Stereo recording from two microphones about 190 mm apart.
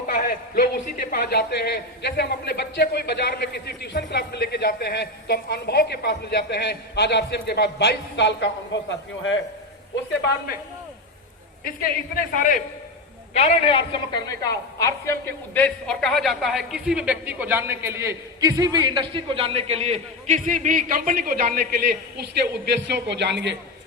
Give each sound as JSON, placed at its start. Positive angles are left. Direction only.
{"t": 0.1, "sound": "speech", "side_deg": 50}
{"t": 11.6, "sound": "a woman's voice", "side_deg": 50}
{"t": 13.3, "sound": "a woman's voice", "side_deg": 35}
{"t": 22.2, "sound": "a woman's voice", "side_deg": -65}